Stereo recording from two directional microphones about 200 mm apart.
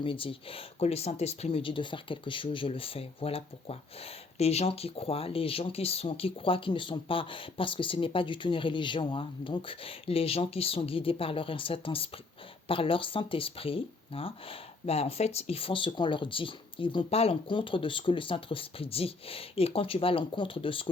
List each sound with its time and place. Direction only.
0.0 s speech: 25° left (ahead or behind)